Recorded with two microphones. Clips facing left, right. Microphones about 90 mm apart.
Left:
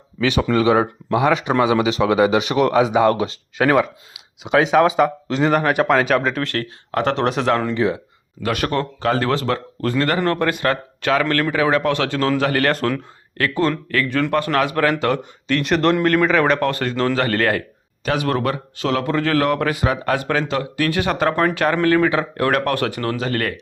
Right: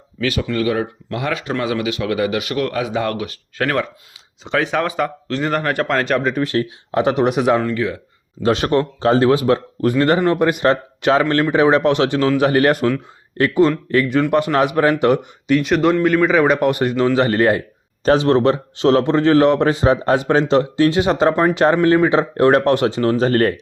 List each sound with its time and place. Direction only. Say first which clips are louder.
1.1 s speech: left 6 dB; 20° left (ahead or behind); by 6.3 s centre (ahead or behind)
6.5 s speech: right 4 dB; 15° right (ahead or behind)
7.8 s speech: left 2 dB; 25° left (ahead or behind)
8.4 s speech: right 5 dB; 25° right (ahead or behind)
15.6 s speech: even; 5° right (ahead or behind); by 23.1 s 20° right (ahead or behind)
23.1 s speech: right 7 dB; 35° right (ahead or behind)